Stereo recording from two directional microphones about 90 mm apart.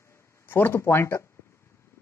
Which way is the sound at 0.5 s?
25° left (ahead or behind).